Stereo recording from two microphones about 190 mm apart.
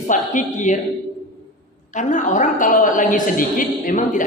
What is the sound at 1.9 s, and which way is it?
A woman's voice, 40° left (ahead or behind).